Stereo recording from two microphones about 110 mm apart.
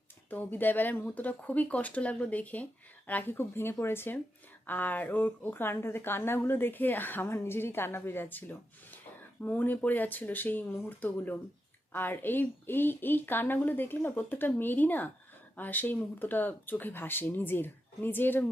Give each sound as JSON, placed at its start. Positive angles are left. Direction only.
{"t": 0.3, "sound": "a woman's voice", "side_deg": 15}